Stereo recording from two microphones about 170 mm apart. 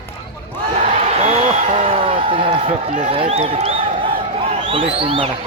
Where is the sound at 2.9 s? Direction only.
45° right (ahead or behind).